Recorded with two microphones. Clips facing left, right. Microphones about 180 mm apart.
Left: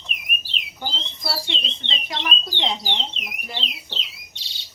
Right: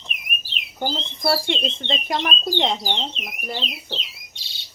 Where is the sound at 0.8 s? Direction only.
50° right (ahead or behind).